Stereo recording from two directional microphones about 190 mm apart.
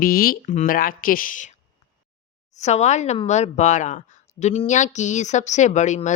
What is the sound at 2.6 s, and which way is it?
Speech, 35° left (ahead or behind).